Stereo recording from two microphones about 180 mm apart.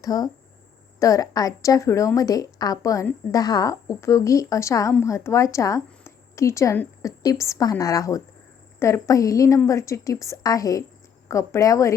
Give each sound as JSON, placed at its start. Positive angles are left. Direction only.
{"t": 0.0, "sound": "a woman's voice", "side_deg": 20}